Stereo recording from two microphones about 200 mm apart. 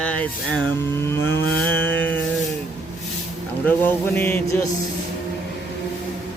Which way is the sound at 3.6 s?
10° left (ahead or behind).